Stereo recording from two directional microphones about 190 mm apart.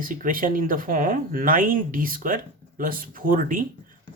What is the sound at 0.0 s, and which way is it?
Speech, 45° right (ahead or behind).